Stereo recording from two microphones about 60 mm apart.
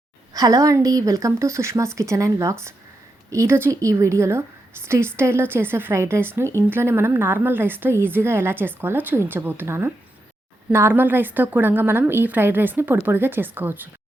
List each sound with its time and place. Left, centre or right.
0.3 s a woman's voice: right